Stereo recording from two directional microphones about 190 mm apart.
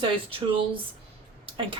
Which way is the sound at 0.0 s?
30° right (ahead or behind).